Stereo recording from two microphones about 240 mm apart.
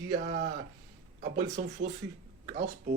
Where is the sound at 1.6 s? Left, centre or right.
Right.